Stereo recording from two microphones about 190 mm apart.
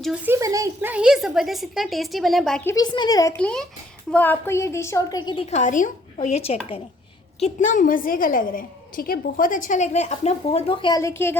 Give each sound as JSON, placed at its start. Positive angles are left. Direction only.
{"t": 0.0, "sound": "speech", "side_deg": -5}
{"t": 0.3, "sound": "speech", "side_deg": -15}
{"t": 2.6, "sound": "a woman's voice", "side_deg": 20}
{"t": 3.3, "sound": "a woman's voice", "side_deg": 5}